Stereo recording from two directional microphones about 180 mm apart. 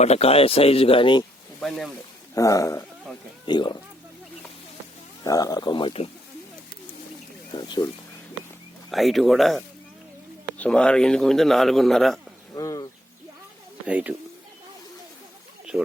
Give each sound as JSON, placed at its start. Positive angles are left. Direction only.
{"t": 0.0, "sound": "speech", "side_deg": 35}
{"t": 1.6, "sound": "a man's voice", "side_deg": 0}
{"t": 2.3, "sound": "speech", "side_deg": 20}
{"t": 5.2, "sound": "speech", "side_deg": 20}
{"t": 7.5, "sound": "speech", "side_deg": 20}
{"t": 8.9, "sound": "a man's voice", "side_deg": 0}
{"t": 12.5, "sound": "bird", "side_deg": 20}
{"t": 13.8, "sound": "speech", "side_deg": -10}
{"t": 15.7, "sound": "speech", "side_deg": -5}